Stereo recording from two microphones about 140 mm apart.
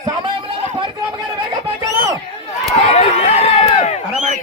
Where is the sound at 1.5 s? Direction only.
30° right (ahead or behind).